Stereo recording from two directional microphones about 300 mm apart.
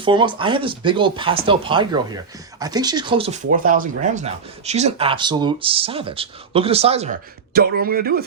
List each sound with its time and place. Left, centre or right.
0.0 s speech: centre
7.5 s speech: right